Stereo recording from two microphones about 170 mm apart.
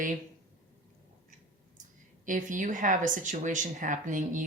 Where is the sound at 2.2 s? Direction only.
50° right (ahead or behind).